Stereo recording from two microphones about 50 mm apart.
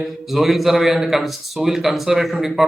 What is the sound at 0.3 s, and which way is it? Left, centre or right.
A man's voice, centre.